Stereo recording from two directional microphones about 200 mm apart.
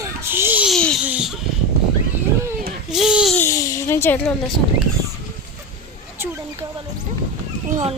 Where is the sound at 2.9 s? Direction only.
5° right (ahead or behind).